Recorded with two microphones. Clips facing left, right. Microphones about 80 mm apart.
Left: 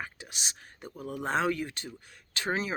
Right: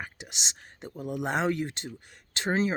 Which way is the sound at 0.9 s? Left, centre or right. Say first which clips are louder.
Right 1 dB; centre.